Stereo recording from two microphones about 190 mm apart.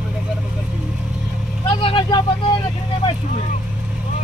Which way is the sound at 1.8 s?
25° left (ahead or behind).